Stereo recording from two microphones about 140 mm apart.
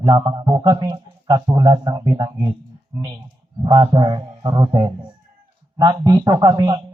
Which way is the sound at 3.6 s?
30° right (ahead or behind).